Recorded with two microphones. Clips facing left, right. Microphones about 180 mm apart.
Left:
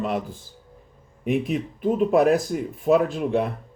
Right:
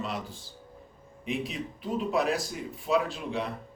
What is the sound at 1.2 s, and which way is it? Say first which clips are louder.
Speech: left 9 dB; 55° left (ahead or behind).